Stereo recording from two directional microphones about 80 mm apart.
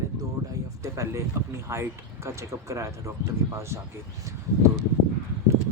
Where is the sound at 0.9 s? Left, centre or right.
Right.